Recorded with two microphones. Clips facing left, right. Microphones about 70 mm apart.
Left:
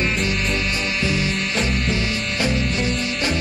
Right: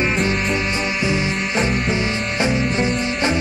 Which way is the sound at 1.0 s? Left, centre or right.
Right.